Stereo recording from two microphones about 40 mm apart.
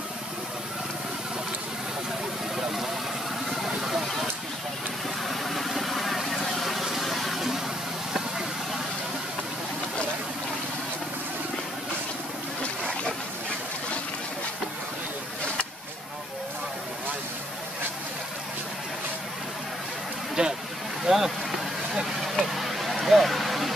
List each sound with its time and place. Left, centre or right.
2.5 s vehicle: centre
3.6 s a sound: centre
5.3 s vehicle: centre
20.4 s vehicle: right
21.0 s vehicle: centre
21.9 s a sound: centre